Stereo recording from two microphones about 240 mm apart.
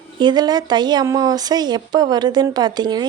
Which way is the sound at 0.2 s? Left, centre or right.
Centre.